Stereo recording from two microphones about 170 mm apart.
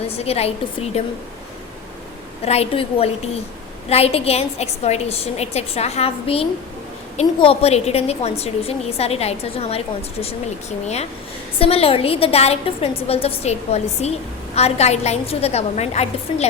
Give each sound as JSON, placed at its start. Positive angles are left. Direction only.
{"t": 0.1, "sound": "a woman's voice", "side_deg": 35}
{"t": 2.4, "sound": "a woman's voice", "side_deg": 35}